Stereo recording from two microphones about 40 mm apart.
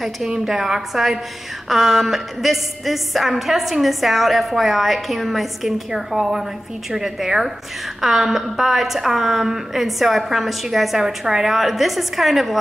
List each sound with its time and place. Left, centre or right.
0.5 s a woman's voice: centre